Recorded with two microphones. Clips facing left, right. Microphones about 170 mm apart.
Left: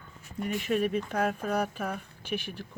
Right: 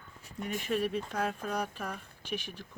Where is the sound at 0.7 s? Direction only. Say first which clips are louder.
Left 4 dB; 60° left (ahead or behind).